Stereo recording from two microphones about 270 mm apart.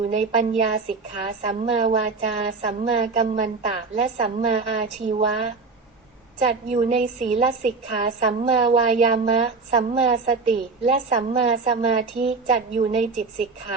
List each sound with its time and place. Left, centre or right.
0.1 s a woman's voice: right
6.5 s a woman's voice: right